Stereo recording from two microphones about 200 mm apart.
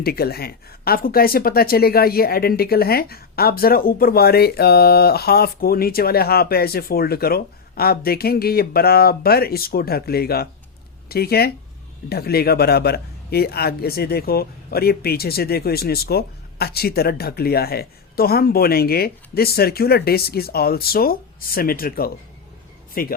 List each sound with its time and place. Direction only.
0.0 s speech: 50° left (ahead or behind)